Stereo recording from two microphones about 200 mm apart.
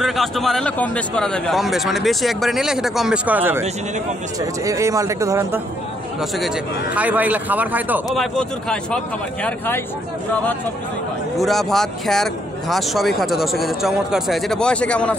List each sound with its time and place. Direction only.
0.0 s speech: centre (ahead or behind); by 5.6 s 15° right (ahead or behind)
6.3 s speech: centre (ahead or behind)
11.3 s speech: centre (ahead or behind)